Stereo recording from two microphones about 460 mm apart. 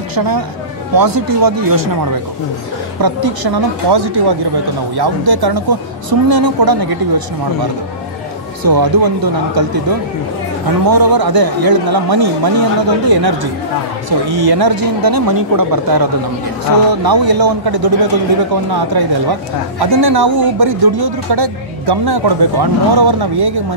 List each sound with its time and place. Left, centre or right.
0.9 s speech: right
8.6 s speech: right